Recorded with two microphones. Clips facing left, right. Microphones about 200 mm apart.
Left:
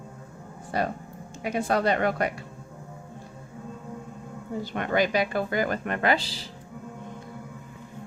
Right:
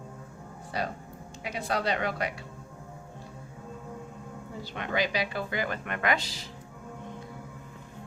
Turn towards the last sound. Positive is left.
turn(degrees=30)  # may be behind; listen again after turning